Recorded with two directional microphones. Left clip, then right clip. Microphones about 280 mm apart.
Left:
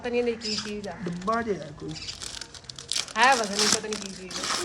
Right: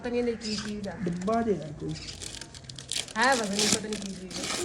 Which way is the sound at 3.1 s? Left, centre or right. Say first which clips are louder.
Left 4 dB; left.